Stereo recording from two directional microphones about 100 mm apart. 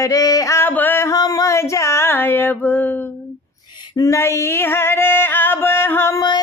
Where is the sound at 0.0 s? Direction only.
35° left (ahead or behind).